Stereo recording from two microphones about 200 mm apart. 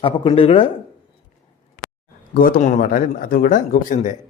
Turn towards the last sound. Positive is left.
turn(degrees=40)  # may be behind; listen again after turning